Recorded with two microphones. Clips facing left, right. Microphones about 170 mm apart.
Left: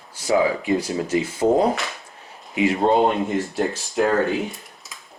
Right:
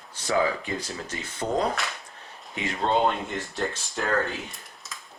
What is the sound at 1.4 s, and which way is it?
Speech, 55° left (ahead or behind).